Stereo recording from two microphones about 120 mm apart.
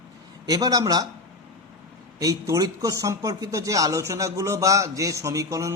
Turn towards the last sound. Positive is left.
turn(degrees=-25)  # may be behind; listen again after turning